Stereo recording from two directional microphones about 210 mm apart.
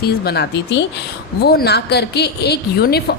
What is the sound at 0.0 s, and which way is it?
A woman's voice, 50° left (ahead or behind).